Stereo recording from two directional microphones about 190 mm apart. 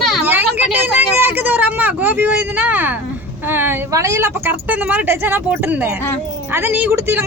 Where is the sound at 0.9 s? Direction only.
10° right (ahead or behind).